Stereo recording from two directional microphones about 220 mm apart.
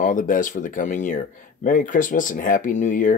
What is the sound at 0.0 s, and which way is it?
Speech, 35° left (ahead or behind).